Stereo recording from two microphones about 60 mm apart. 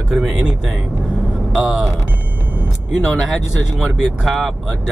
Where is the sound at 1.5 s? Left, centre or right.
Centre.